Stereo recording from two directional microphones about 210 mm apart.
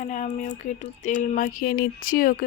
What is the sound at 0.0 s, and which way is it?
Speech, 35° left (ahead or behind).